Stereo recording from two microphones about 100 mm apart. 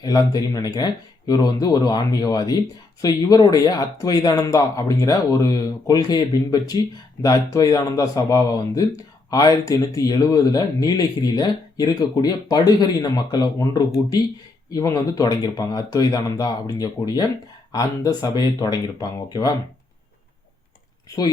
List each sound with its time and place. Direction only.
0.0 s speech: 40° left (ahead or behind)